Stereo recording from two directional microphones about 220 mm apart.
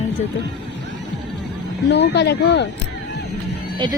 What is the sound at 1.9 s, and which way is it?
Speech, 50° left (ahead or behind).